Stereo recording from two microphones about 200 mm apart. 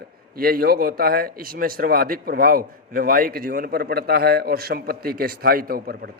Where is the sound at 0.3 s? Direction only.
45° right (ahead or behind).